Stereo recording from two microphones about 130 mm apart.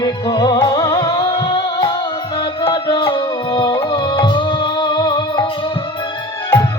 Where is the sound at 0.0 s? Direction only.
30° left (ahead or behind).